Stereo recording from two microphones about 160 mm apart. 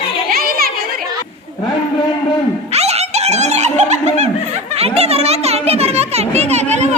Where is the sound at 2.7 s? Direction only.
40° right (ahead or behind).